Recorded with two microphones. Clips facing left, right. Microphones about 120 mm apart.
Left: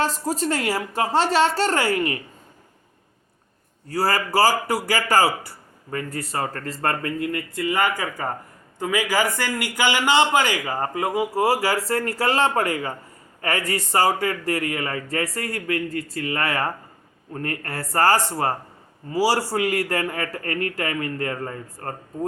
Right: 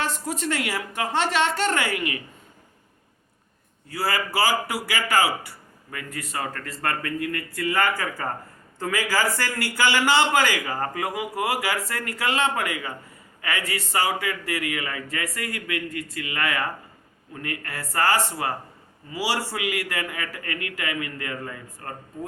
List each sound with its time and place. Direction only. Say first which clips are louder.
0.0 s a man's voice: left 4 dB; 35° left (ahead or behind)
3.8 s a man's voice: left 4 dB; 40° left (ahead or behind)